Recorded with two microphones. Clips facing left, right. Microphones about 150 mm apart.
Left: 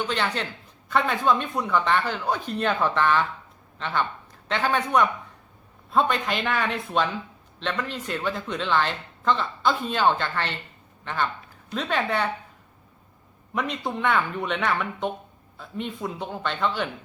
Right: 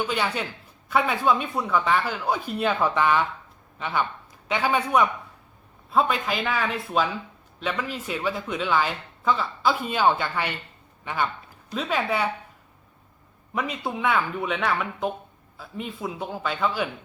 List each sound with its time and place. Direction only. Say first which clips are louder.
0.0 s a man's voice: right 1 dB; 10° right (ahead or behind)
13.5 s speech: even; centre (ahead or behind)